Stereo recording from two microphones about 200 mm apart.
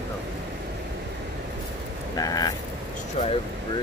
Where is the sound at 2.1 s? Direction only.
20° left (ahead or behind).